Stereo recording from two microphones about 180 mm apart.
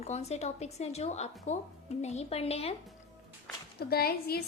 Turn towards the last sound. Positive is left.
turn(degrees=60)  # may be behind; listen again after turning